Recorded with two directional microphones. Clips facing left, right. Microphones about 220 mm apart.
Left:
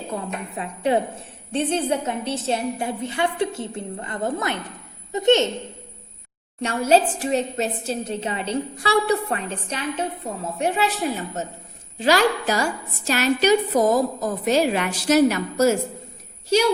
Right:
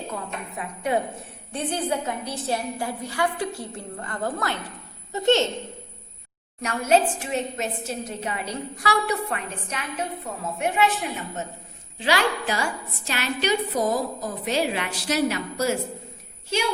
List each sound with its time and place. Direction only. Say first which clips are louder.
0.1 s a woman's voice: left 4 dB; 30° left (ahead or behind)
6.6 s a woman's voice: left 3 dB; 30° left (ahead or behind)